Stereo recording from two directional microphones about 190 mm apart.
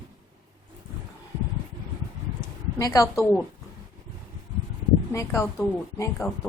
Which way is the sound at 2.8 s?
20° left (ahead or behind).